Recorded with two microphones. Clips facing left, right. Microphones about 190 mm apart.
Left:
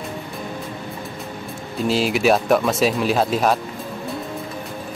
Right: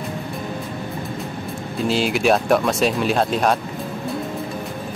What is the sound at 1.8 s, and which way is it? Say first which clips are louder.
Speech: left 1 dB; centre (ahead or behind).